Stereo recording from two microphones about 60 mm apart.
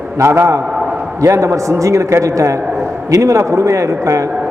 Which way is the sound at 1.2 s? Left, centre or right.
Right.